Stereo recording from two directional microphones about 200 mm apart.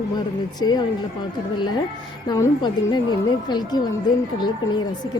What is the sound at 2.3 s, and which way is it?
Speech, 20° left (ahead or behind).